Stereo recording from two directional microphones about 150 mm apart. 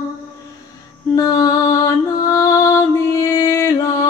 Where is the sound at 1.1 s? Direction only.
25° left (ahead or behind).